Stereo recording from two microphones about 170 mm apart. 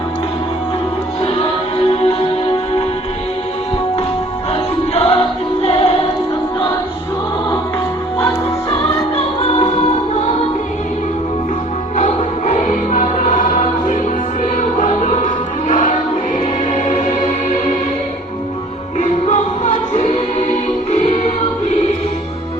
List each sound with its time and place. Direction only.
1.2 s music: 35° left (ahead or behind)
4.5 s music: 35° left (ahead or behind)
9.1 s music: 40° left (ahead or behind)
11.9 s music: 45° left (ahead or behind)
14.8 s choir: 45° left (ahead or behind)
15.7 s music: 50° left (ahead or behind)
18.9 s music: 45° left (ahead or behind)